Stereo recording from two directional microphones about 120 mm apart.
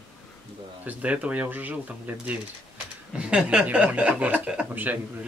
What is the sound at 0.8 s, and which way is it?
Speech, 10° right (ahead or behind).